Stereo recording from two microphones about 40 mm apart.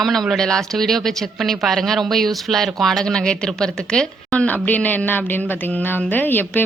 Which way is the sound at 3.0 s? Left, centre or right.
Left.